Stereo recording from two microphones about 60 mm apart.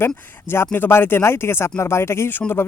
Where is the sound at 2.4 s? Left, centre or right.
Left.